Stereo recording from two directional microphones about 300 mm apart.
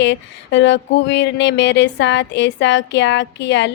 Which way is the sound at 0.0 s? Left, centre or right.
Left.